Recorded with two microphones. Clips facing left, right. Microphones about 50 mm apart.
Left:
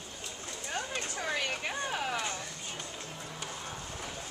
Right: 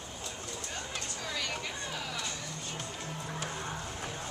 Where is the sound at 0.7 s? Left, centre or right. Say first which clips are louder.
Left 7 dB; left.